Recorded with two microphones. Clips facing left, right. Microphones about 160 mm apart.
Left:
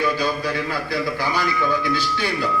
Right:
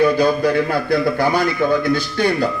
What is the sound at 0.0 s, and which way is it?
A man's voice, 50° right (ahead or behind).